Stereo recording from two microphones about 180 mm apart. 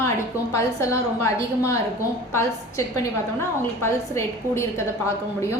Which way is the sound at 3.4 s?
15° left (ahead or behind).